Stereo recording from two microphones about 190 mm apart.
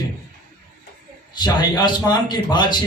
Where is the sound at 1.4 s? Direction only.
20° left (ahead or behind).